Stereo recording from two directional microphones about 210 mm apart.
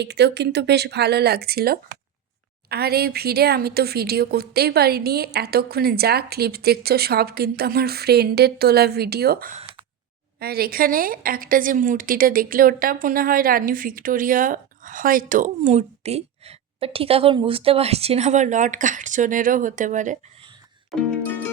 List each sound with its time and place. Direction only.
0.0 s a woman's voice: 55° right (ahead or behind); by 20.1 s 35° right (ahead or behind)